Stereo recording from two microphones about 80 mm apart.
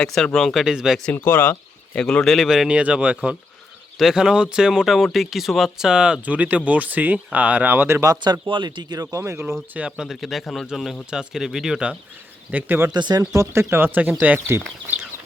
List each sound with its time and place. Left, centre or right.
0.0 s speech: centre
0.6 s speech: centre
1.1 s speech: left
2.0 s speech: centre
3.9 s speech: centre; by 8.0 s right
8.2 s speech: right
9.0 s speech: right
9.7 s speech: centre
10.1 s speech: centre
12.5 s speech: right
12.9 s speech: right
13.3 s speech: right